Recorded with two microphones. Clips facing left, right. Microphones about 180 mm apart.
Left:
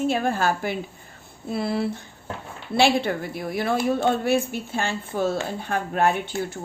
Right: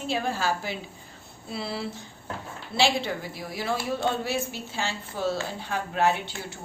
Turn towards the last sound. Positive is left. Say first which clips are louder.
# left 3 dB
turn(degrees=50)  # may be behind; listen again after turning